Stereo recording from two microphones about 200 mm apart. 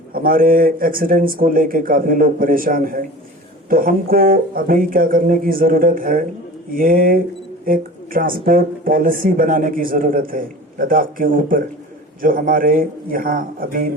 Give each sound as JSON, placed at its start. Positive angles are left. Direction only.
{"t": 0.1, "sound": "speech", "side_deg": -45}